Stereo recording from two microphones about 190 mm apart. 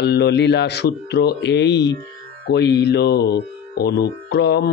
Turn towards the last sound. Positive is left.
turn(degrees=60)  # may be behind; listen again after turning